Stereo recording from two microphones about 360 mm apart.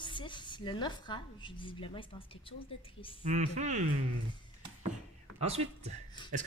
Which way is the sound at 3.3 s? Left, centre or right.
Centre.